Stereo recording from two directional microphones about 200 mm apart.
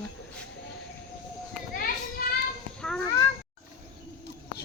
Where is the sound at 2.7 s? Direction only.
5° left (ahead or behind).